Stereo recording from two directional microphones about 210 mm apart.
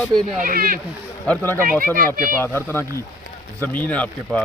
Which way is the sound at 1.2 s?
10° left (ahead or behind).